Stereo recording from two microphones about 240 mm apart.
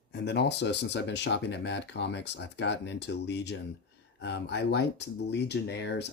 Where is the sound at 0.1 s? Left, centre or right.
Left.